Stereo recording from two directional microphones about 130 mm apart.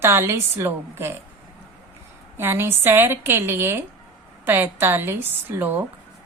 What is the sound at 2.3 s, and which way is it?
A woman's voice, 20° right (ahead or behind).